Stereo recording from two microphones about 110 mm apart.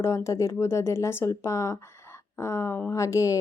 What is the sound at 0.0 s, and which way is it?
Speech, 25° left (ahead or behind).